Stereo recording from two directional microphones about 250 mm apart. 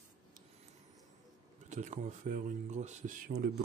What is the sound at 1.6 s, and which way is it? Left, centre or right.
Speech, right.